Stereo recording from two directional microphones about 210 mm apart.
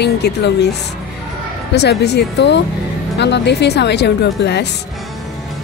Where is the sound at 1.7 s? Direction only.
50° left (ahead or behind).